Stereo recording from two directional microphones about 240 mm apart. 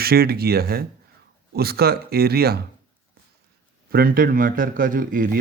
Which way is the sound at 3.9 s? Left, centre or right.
Right.